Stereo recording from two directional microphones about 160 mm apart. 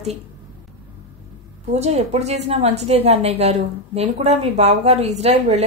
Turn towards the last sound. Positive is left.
turn(degrees=-45)  # may be behind; listen again after turning